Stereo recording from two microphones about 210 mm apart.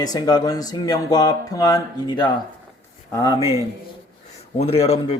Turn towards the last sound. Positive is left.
turn(degrees=25)  # may be behind; listen again after turning